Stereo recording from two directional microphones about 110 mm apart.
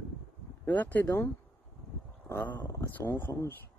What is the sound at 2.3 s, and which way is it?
Speech, 20° left (ahead or behind).